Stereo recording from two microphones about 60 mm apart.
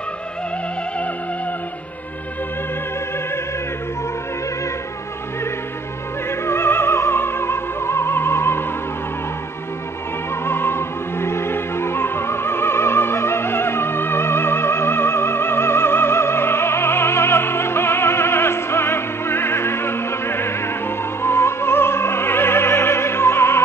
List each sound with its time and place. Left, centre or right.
6.4 s opera: left
10.4 s opera: left